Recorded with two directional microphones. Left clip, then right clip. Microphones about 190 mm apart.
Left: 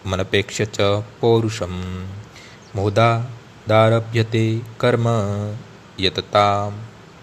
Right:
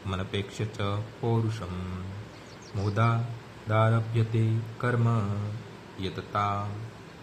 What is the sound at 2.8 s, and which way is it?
Speech, 40° left (ahead or behind).